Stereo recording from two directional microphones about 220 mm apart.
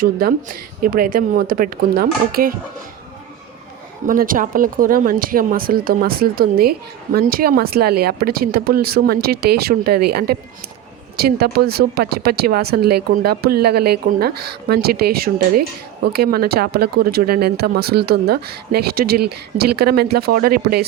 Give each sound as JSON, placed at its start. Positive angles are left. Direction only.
{"t": 0.0, "sound": "speech", "side_deg": -40}
{"t": 4.0, "sound": "speech", "side_deg": -40}